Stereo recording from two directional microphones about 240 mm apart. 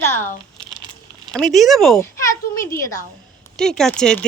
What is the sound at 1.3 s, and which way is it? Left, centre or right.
Speech, centre.